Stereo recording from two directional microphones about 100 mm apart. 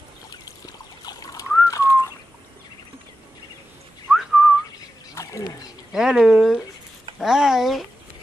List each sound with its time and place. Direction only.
0.3 s trickle: 40° left (ahead or behind)
1.7 s bird: 30° left (ahead or behind)
4.1 s whistling: 5° right (ahead or behind)
5.1 s wild animals: 30° left (ahead or behind)
5.9 s speech: 5° right (ahead or behind)
7.2 s a sound: 5° right (ahead or behind)